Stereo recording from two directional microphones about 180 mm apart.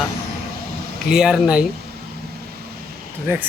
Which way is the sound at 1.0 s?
5° right (ahead or behind).